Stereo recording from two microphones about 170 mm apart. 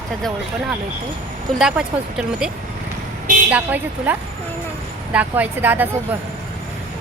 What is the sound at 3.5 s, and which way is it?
Speech, 10° right (ahead or behind).